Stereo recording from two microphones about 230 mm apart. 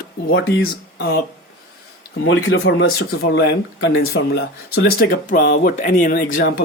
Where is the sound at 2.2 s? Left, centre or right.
Left.